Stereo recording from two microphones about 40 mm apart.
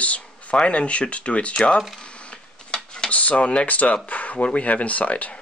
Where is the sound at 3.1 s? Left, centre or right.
Left.